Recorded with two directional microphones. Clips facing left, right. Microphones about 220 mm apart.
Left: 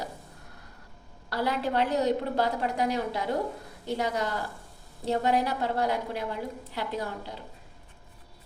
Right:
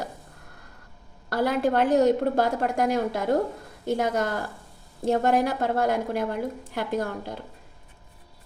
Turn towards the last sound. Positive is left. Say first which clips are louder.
# right 6 dB
turn(degrees=-50)  # may be behind; listen again after turning